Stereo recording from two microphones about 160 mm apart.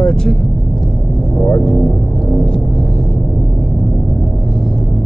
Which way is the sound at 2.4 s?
5° left (ahead or behind).